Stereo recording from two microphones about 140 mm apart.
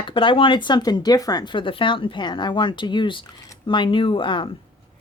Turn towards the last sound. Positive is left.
turn(degrees=35)  # may be behind; listen again after turning